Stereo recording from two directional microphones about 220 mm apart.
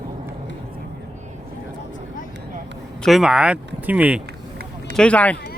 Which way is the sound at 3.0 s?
Centre (ahead or behind).